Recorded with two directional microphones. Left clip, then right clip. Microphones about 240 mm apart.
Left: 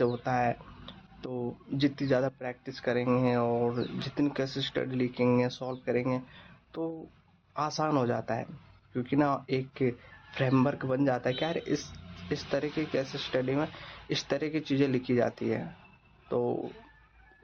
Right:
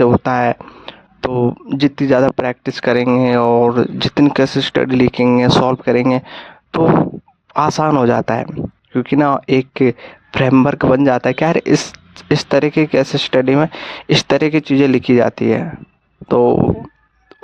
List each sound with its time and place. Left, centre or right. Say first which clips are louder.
0.0 s speech: right 15 dB; right